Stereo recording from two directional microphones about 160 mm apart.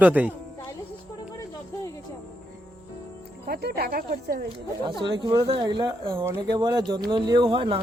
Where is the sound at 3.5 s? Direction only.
85° right; by 4.4 s 70° right (ahead or behind).